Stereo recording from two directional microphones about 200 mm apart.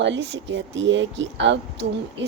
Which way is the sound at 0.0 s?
65° right (ahead or behind).